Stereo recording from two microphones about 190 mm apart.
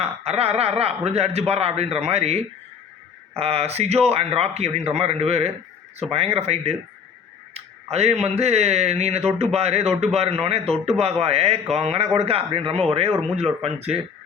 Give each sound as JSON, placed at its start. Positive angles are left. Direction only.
{"t": 0.3, "sound": "speech", "side_deg": -35}